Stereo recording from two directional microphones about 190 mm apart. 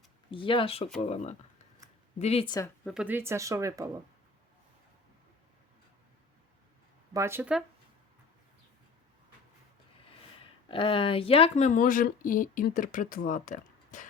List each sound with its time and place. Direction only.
0.3 s speech: 25° left (ahead or behind)
2.8 s speech: 5° right (ahead or behind)
7.1 s speech: 15° right (ahead or behind)
10.7 s speech: 30° left (ahead or behind)